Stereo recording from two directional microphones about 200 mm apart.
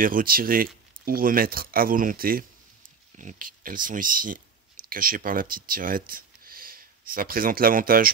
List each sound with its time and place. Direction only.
0.0 s speech: 45° right (ahead or behind)